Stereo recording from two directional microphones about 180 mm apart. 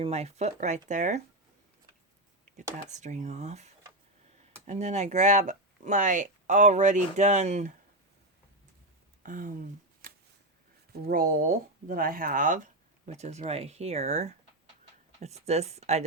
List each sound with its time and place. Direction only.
0.0 s speech: 35° right (ahead or behind)
2.9 s speech: 40° right (ahead or behind)
9.2 s speech: 50° right (ahead or behind)